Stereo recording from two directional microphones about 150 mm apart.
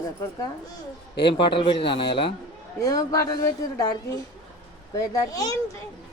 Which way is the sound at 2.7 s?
25° left (ahead or behind).